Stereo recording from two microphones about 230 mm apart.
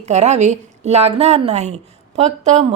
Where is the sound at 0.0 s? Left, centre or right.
Right.